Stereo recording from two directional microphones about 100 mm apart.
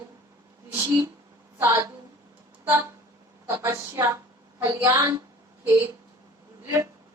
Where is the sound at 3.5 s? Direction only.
30° right (ahead or behind).